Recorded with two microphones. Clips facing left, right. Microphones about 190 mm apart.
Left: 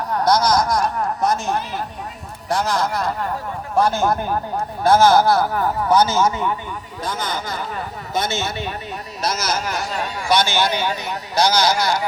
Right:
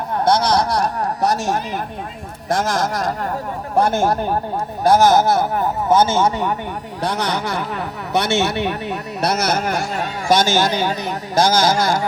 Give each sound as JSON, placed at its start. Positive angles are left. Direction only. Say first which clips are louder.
{"t": 0.1, "sound": "speech", "louder": "right 1 dB", "side_deg": -25}
{"t": 2.5, "sound": "speech", "louder": "right 1 dB", "side_deg": -45}
{"t": 4.8, "sound": "a man's voice", "louder": "right 1 dB", "side_deg": -15}
{"t": 7.0, "sound": "speech", "louder": "right 5 dB", "side_deg": -70}